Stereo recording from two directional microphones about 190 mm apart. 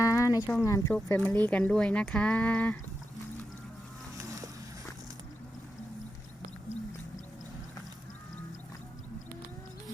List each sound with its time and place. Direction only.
0.0 s a sound: 20° left (ahead or behind)
0.6 s speech: 15° left (ahead or behind)
4.2 s vehicle: 20° right (ahead or behind)